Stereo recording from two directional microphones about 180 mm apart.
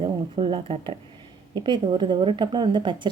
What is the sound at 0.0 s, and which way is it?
Speech, 30° right (ahead or behind).